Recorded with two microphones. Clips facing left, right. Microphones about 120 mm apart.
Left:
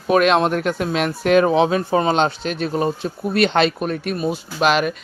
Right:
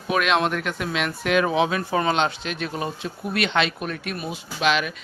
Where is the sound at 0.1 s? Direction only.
40° left (ahead or behind).